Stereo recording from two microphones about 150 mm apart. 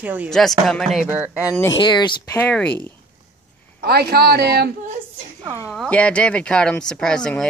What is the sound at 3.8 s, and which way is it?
Speech, 90° right.